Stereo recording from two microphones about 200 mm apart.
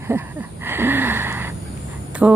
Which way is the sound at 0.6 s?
10° right (ahead or behind).